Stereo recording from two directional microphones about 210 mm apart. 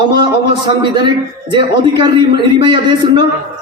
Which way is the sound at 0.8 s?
20° right (ahead or behind).